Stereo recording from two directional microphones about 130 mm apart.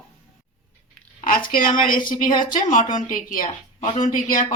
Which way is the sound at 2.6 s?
80° left.